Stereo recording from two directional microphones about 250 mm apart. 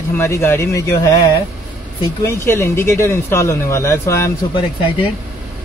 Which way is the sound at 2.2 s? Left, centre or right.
Centre.